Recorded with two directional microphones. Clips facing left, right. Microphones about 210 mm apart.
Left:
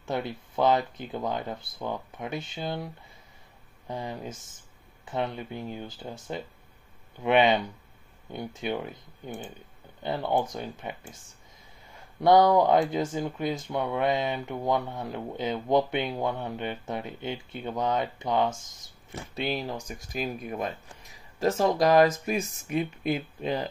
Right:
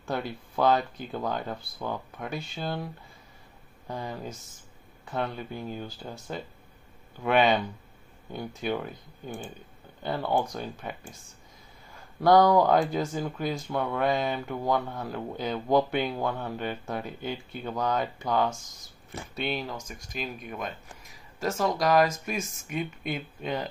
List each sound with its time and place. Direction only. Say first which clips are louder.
0.0 s speech: left 1 dB; 20° left (ahead or behind)
10.0 s speech: even; 20° left (ahead or behind)
12.2 s speech: even; 20° left (ahead or behind)